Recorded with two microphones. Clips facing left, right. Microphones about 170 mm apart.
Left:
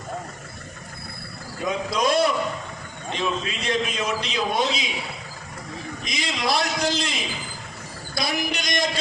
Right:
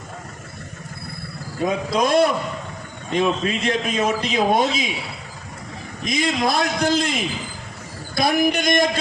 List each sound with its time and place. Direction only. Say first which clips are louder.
1.6 s a man's voice: right 3 dB; 50° right (ahead or behind)
6.1 s a man's voice: right 5 dB; 50° right (ahead or behind)